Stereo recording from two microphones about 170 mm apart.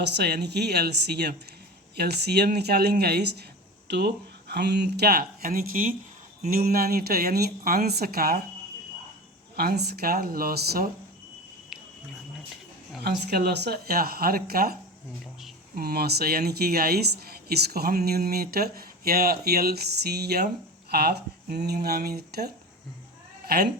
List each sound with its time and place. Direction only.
0.0 s speech: 75° right (ahead or behind)
9.6 s speech: 70° right (ahead or behind)
13.0 s speech: 70° right (ahead or behind)
15.2 s a sound: centre (ahead or behind)
15.7 s speech: 65° right (ahead or behind)